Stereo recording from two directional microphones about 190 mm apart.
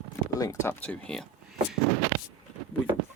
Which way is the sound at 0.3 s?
15° left (ahead or behind).